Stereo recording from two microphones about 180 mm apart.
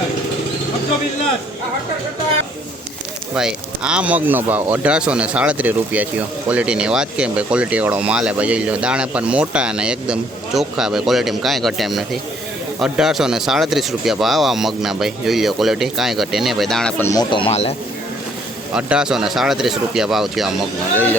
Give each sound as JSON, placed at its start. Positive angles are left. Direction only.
{"t": 3.3, "sound": "speech", "side_deg": -5}
{"t": 17.0, "sound": "speech", "side_deg": 20}
{"t": 18.7, "sound": "speech", "side_deg": -5}